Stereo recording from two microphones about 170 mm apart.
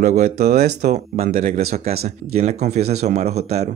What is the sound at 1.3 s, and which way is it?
Speech, 55° right (ahead or behind).